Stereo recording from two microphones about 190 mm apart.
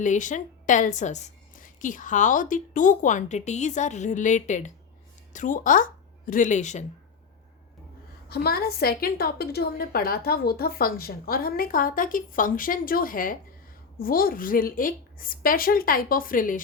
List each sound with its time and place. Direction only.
0.0 s a woman's voice: 40° left (ahead or behind)
8.3 s a woman's voice: 55° left (ahead or behind)